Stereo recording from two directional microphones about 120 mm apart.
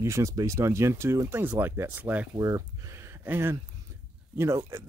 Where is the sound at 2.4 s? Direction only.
30° right (ahead or behind).